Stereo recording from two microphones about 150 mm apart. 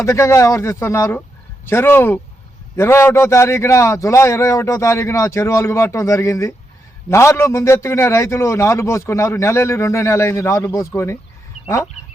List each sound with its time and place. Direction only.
0.0 s a man's voice: 20° left (ahead or behind)